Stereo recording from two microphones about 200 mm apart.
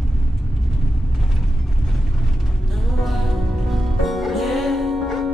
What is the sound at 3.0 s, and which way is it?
Music, centre (ahead or behind).